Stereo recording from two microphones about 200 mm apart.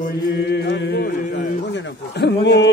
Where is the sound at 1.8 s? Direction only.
60° left (ahead or behind).